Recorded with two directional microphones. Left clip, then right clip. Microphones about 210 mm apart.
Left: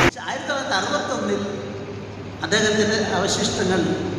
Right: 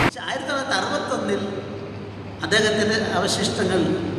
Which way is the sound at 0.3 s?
50° right (ahead or behind).